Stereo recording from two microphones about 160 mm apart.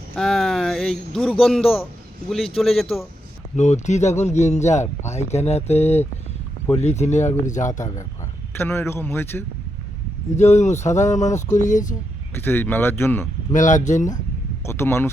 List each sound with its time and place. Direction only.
0.2 s speech: centre (ahead or behind)
3.5 s speech: 45° left (ahead or behind)
8.5 s speech: 15° left (ahead or behind)
10.3 s speech: 45° left (ahead or behind)
12.4 s speech: 15° left (ahead or behind)
13.5 s speech: 50° left (ahead or behind)
14.6 s speech: 15° left (ahead or behind)